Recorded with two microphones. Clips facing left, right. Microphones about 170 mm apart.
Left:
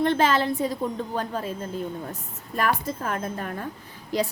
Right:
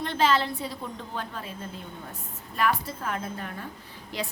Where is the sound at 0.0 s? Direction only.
50° left (ahead or behind).